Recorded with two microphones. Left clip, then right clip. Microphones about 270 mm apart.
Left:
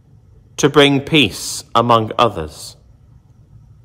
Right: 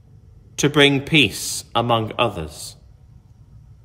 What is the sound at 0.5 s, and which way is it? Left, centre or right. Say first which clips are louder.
Speech: left 4 dB; centre.